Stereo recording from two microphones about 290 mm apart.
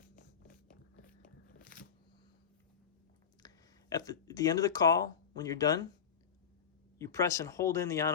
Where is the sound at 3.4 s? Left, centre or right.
Centre.